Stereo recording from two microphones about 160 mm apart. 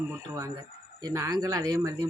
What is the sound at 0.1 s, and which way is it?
Speech, 20° right (ahead or behind).